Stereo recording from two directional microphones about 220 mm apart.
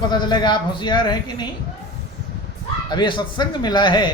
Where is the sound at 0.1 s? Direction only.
20° left (ahead or behind).